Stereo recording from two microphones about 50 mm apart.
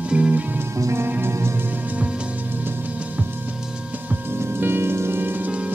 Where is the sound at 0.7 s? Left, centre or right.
Right.